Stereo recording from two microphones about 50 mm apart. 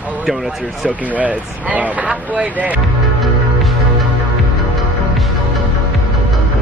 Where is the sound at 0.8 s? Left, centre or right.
Right.